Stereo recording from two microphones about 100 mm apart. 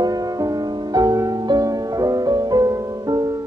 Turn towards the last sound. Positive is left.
turn(degrees=-40)  # may be behind; listen again after turning